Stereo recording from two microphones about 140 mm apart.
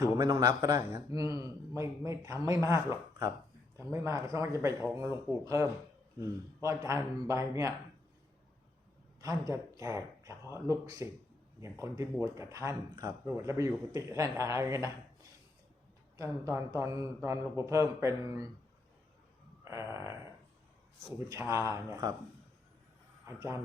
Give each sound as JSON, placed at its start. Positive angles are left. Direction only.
{"t": 0.0, "sound": "speech", "side_deg": -25}
{"t": 9.2, "sound": "speech", "side_deg": -25}
{"t": 16.1, "sound": "speech", "side_deg": -20}
{"t": 19.6, "sound": "speech", "side_deg": -20}
{"t": 21.2, "sound": "speech", "side_deg": -20}
{"t": 23.2, "sound": "speech", "side_deg": -20}